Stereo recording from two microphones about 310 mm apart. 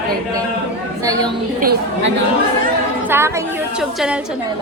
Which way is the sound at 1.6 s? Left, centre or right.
Right.